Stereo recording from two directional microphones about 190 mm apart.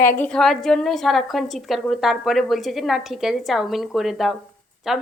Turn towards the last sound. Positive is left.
turn(degrees=0)  # may be behind; listen again after turning